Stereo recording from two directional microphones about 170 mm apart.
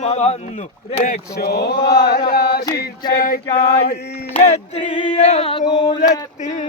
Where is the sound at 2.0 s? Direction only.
70° left (ahead or behind).